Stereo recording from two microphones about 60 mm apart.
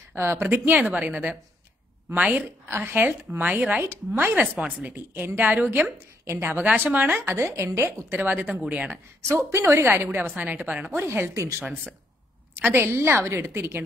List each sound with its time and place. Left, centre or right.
0.1 s a woman's voice: right
0.7 s a woman's voice: right
2.7 s a woman's voice: right
3.5 s a woman's voice: right
3.8 s a woman's voice: right
4.2 s a woman's voice: right
5.9 s a woman's voice: right
6.4 s a woman's voice: right
7.2 s a woman's voice: right
8.2 s a woman's voice: right
9.3 s a woman's voice: right
10.0 s a woman's voice: right
11.1 s a woman's voice: right
12.5 s a woman's voice: right